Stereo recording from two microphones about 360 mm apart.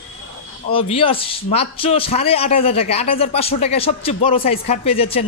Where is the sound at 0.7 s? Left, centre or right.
Centre.